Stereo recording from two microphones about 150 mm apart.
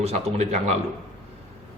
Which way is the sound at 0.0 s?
45° right (ahead or behind).